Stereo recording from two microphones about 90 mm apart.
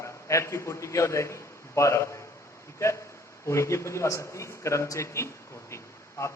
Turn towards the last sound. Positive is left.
turn(degrees=30)  # may be behind; listen again after turning